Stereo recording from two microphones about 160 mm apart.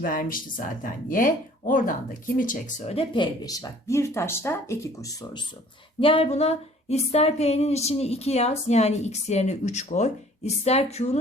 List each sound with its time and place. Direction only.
0.0 s speech: 60° left (ahead or behind); by 5.4 s 20° left (ahead or behind)
6.0 s speech: 35° left (ahead or behind)